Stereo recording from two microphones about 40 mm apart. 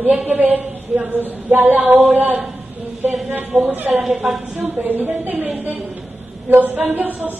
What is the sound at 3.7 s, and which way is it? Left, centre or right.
Speech, right.